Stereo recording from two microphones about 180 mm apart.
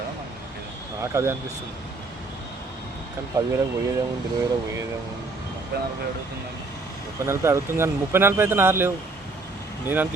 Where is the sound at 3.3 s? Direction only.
20° right (ahead or behind).